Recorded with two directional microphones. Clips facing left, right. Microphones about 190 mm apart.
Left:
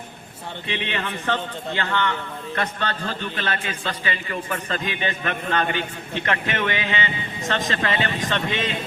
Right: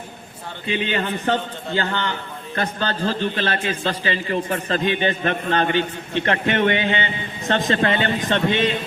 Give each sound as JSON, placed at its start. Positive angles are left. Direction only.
{"t": 0.7, "sound": "a man's voice", "side_deg": -30}